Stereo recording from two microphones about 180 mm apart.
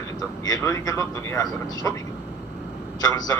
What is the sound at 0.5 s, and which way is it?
A man's voice, 15° left (ahead or behind).